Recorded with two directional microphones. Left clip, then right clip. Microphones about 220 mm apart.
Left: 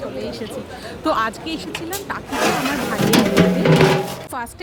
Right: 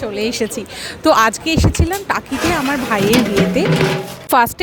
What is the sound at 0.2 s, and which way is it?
Speech, 35° right (ahead or behind).